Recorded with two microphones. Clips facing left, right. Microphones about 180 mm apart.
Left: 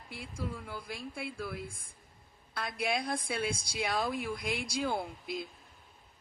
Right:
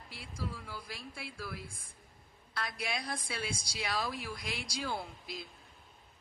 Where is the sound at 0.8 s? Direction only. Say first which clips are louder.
Left 5 dB; 55° left (ahead or behind).